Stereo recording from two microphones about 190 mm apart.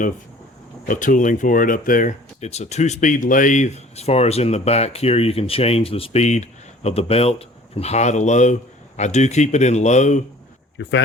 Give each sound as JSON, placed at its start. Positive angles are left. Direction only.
{"t": 0.9, "sound": "speech", "side_deg": 45}
{"t": 10.8, "sound": "speech", "side_deg": 65}